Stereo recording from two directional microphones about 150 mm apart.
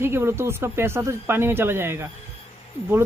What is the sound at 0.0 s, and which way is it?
Speech, 15° right (ahead or behind).